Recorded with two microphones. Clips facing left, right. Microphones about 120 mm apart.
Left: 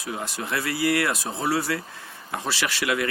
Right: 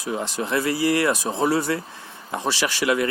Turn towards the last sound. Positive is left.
turn(degrees=-30)  # may be behind; listen again after turning